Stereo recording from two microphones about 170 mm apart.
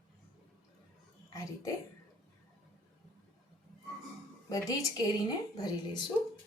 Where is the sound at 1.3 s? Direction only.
20° left (ahead or behind).